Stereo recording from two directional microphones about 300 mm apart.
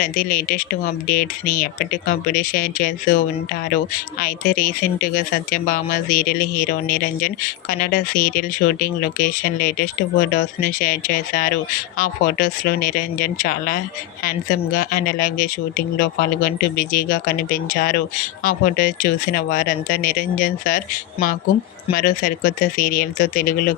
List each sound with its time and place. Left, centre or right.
0.0 s speech: left